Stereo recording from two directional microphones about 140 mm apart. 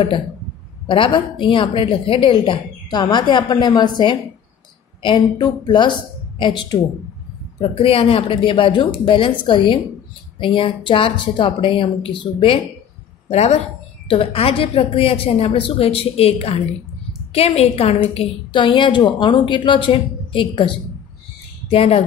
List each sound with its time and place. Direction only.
0.8 s a woman's voice: 35° left (ahead or behind)
13.3 s a woman's voice: 50° left (ahead or behind)